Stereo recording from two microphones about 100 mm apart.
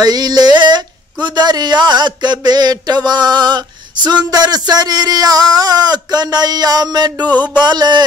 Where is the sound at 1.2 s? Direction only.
45° right (ahead or behind).